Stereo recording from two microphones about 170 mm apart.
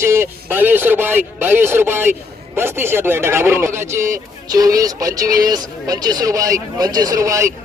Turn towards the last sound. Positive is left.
turn(degrees=-20)  # may be behind; listen again after turning